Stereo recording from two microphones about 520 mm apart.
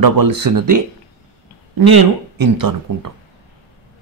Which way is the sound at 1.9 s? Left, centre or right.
Right.